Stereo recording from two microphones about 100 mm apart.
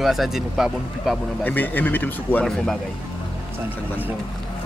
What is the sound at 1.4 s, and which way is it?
Speech, 20° left (ahead or behind).